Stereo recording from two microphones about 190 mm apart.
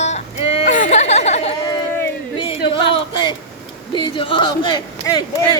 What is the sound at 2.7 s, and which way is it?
Speech, 25° left (ahead or behind).